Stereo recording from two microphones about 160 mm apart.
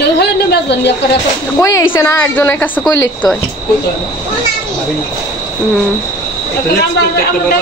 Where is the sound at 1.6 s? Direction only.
20° left (ahead or behind).